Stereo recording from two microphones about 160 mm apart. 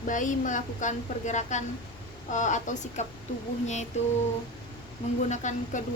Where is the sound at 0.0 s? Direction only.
55° left (ahead or behind).